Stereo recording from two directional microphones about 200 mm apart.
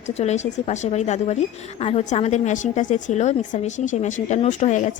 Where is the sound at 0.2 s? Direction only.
35° left (ahead or behind).